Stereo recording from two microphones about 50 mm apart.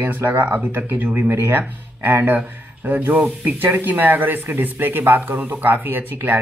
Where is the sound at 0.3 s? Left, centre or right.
Right.